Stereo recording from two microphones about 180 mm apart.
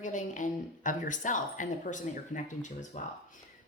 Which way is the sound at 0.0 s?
45° left (ahead or behind).